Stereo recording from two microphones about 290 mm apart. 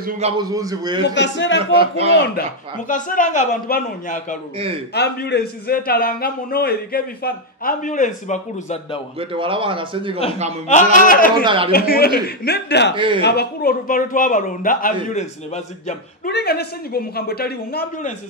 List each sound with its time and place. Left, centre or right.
0.4 s speech: centre
1.0 s a man's voice: left
1.6 s speech: centre
2.9 s a man's voice: left
9.2 s speech: centre
10.7 s a man's voice: left
11.4 s speech: centre
11.7 s a man's voice: left
12.9 s speech: centre
13.2 s a man's voice: left